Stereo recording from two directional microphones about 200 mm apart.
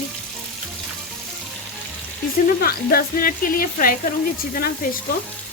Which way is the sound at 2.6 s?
45° left (ahead or behind).